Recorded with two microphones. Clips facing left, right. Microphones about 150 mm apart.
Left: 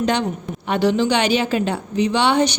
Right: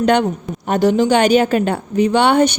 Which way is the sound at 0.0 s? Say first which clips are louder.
Right 5 dB; 55° right (ahead or behind).